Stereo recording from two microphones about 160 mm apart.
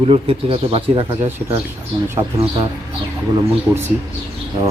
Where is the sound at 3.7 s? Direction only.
20° right (ahead or behind).